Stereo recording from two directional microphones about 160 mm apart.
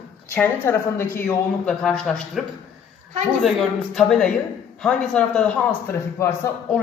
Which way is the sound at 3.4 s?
Centre (ahead or behind).